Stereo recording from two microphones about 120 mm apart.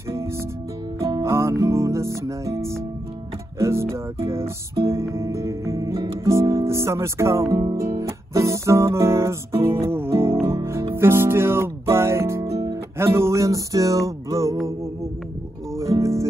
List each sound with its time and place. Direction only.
1.2 s music: 20° right (ahead or behind)
7.7 s guitar: 25° right (ahead or behind)
10.4 s music: 20° right (ahead or behind)
15.8 s music: 25° right (ahead or behind)